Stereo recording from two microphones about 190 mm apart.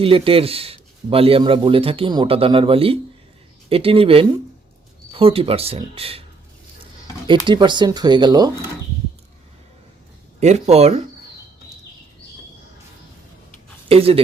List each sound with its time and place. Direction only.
0.0 s speech: 30° right (ahead or behind)
7.3 s speech: 25° right (ahead or behind)
10.4 s speech: 35° right (ahead or behind)
13.8 s speech: 30° right (ahead or behind)